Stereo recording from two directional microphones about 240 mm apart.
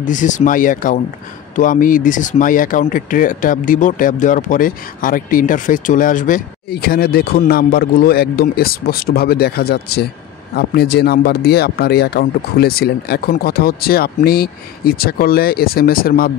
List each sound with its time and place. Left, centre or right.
0.0 s speech: left